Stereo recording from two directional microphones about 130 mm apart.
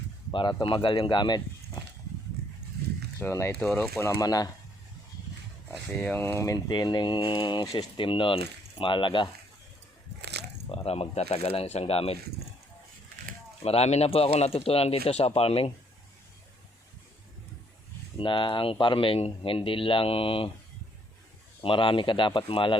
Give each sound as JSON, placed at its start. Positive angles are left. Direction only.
{"t": 0.3, "sound": "speech", "side_deg": 40}
{"t": 3.2, "sound": "speech", "side_deg": 20}
{"t": 6.0, "sound": "speech", "side_deg": 15}
{"t": 6.7, "sound": "speech", "side_deg": 35}
{"t": 10.7, "sound": "speech", "side_deg": 50}
{"t": 13.6, "sound": "speech", "side_deg": 50}
{"t": 18.2, "sound": "speech", "side_deg": 40}
{"t": 21.6, "sound": "speech", "side_deg": 40}